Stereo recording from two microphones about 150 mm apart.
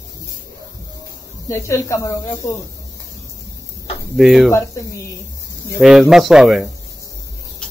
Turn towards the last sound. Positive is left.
turn(degrees=0)  # may be behind; listen again after turning